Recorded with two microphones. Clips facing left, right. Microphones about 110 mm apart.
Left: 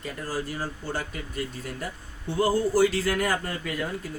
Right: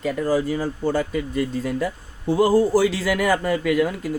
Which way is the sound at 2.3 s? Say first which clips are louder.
Right 7 dB; 90° right.